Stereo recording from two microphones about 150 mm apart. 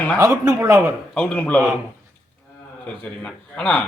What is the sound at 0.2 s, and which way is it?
Speech, 20° right (ahead or behind).